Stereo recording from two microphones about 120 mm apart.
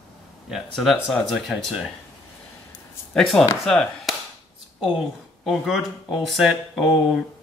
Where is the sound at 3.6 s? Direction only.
Centre (ahead or behind).